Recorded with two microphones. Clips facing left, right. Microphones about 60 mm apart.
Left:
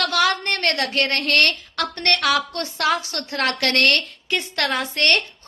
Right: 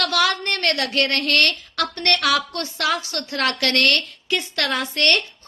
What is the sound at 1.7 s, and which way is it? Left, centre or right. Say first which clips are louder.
A woman's voice: even; left.